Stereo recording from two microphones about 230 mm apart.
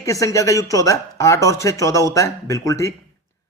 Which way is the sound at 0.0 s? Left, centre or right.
Centre.